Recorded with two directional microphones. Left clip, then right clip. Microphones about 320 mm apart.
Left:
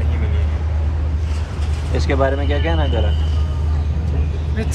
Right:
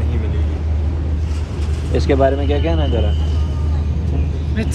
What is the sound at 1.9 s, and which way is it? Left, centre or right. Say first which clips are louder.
Speech: right 4 dB; centre.